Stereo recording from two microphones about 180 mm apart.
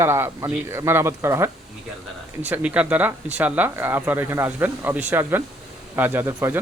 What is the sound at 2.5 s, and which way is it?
Speech, 5° right (ahead or behind).